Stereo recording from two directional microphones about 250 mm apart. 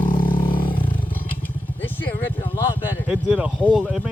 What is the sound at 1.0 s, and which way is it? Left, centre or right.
Vehicle, centre.